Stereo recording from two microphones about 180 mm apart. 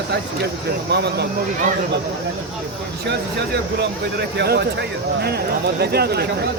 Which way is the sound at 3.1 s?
70° right (ahead or behind).